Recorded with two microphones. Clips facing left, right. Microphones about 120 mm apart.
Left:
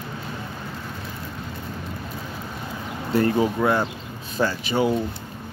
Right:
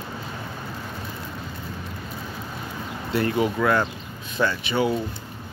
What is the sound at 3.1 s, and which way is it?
Speech, 35° left (ahead or behind).